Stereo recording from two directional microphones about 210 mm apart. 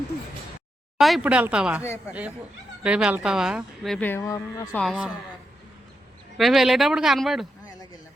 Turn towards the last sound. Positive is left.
turn(degrees=0)  # may be behind; listen again after turning